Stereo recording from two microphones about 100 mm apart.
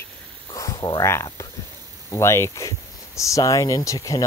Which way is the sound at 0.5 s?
35° left (ahead or behind).